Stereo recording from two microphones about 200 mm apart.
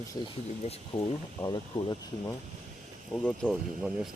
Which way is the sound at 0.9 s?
20° left (ahead or behind).